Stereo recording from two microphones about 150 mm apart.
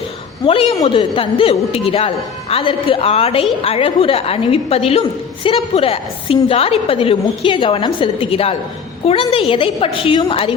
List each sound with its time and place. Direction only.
0.4 s a woman's voice: 40° left (ahead or behind)